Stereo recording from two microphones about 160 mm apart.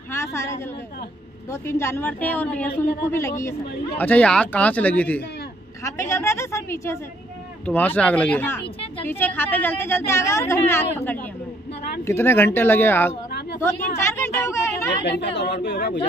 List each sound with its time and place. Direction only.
0.1 s a woman's voice: 15° left (ahead or behind)
5.9 s a woman's voice: 20° left (ahead or behind)
15.0 s a woman's voice: 90° left